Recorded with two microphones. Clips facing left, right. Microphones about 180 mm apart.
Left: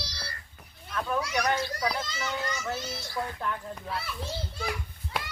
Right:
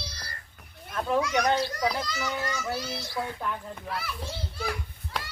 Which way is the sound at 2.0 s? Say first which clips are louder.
Right 2 dB; 20° left (ahead or behind).